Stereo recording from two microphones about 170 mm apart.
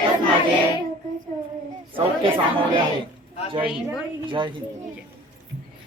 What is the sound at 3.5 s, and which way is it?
Speech, 5° right (ahead or behind).